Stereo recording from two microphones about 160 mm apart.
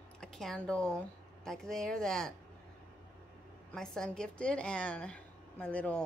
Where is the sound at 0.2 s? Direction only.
5° left (ahead or behind).